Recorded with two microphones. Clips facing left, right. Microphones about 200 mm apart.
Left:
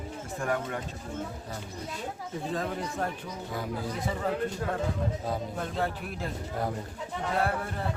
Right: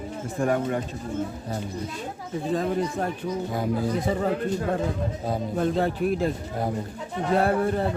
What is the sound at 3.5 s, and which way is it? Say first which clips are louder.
Speech: right 6 dB; 40° right (ahead or behind).